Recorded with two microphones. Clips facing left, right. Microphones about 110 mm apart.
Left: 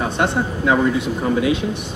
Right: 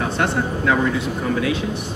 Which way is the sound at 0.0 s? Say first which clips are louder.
Left 1 dB; 20° left (ahead or behind).